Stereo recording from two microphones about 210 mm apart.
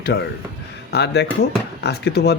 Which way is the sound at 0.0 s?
55° left (ahead or behind).